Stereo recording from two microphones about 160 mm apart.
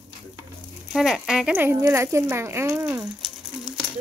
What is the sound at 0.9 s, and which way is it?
Speech, 5° right (ahead or behind).